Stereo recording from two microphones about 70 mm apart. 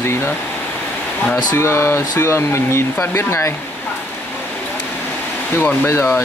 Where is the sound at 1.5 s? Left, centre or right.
Left.